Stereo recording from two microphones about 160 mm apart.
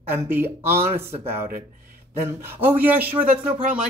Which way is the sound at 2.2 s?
15° right (ahead or behind).